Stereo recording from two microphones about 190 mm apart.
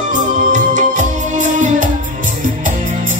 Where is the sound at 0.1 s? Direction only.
40° right (ahead or behind).